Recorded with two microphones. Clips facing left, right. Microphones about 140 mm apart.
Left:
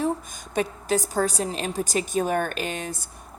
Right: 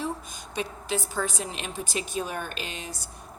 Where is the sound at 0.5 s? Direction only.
45° left (ahead or behind).